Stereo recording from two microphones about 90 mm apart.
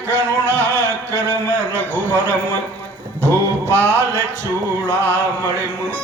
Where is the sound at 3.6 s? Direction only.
30° right (ahead or behind).